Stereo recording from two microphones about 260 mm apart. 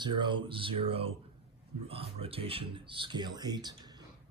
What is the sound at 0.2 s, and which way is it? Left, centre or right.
Speech, centre.